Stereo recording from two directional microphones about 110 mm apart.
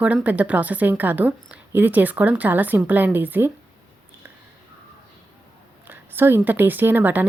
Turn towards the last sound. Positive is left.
turn(degrees=-15)  # may be behind; listen again after turning